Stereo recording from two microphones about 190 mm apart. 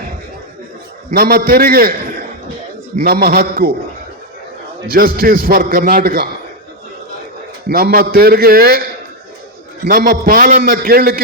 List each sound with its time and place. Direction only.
1.1 s a man's voice: 50° right (ahead or behind)
4.9 s a man's voice: 50° right (ahead or behind)
7.7 s a man's voice: 55° right (ahead or behind)
9.8 s a man's voice: 50° right (ahead or behind)